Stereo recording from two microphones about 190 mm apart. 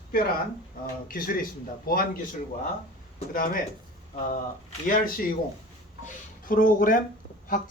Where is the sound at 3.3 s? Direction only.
50° left (ahead or behind).